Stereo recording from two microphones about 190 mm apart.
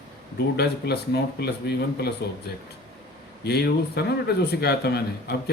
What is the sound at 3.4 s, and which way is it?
Speech, 60° left (ahead or behind).